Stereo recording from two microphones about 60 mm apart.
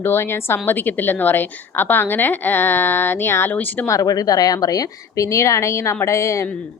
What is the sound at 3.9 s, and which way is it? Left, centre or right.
A woman's voice, left.